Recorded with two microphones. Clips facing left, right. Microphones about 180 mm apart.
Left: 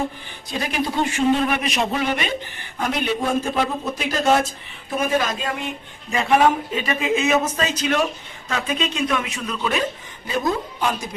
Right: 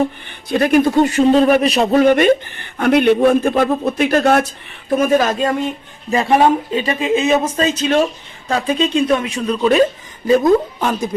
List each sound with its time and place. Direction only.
0.3 s a man's voice: 60° right (ahead or behind)
4.9 s a woman's voice: 50° right (ahead or behind)
6.1 s a woman's voice: 35° right (ahead or behind)